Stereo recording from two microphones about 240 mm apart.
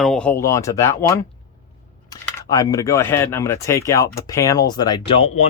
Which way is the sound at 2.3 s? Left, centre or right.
Centre.